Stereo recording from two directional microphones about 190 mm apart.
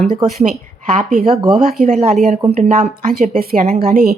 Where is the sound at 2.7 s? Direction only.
45° right (ahead or behind).